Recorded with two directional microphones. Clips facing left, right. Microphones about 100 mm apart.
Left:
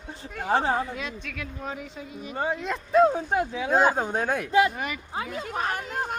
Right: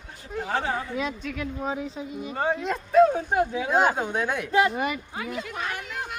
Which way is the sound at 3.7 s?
40° left (ahead or behind).